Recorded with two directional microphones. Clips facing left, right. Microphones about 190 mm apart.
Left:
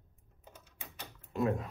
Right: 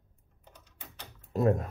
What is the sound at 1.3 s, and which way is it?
Speech, 40° right (ahead or behind).